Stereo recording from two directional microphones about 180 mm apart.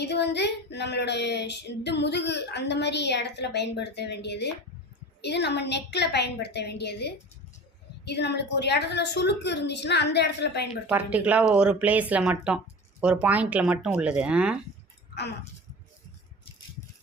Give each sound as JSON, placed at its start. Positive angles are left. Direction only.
{"t": 0.0, "sound": "speech", "side_deg": 70}
{"t": 10.8, "sound": "speech", "side_deg": -5}